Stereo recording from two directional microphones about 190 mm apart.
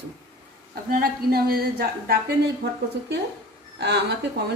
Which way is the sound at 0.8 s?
55° right (ahead or behind).